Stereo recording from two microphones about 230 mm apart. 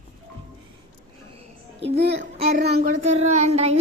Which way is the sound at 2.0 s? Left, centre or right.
Right.